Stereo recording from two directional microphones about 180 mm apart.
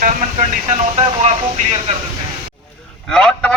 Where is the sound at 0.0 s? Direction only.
40° right (ahead or behind).